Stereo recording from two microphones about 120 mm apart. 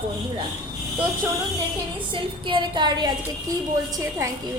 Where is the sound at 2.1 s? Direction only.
45° right (ahead or behind).